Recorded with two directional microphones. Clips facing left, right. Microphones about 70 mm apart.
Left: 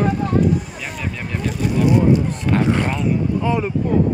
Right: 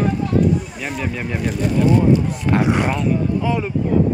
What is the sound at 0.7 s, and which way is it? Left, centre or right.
Speech, centre.